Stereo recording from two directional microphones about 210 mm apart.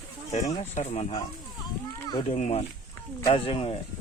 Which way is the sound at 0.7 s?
30° left (ahead or behind).